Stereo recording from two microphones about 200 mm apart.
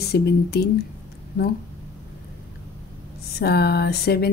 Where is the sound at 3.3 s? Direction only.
55° left (ahead or behind).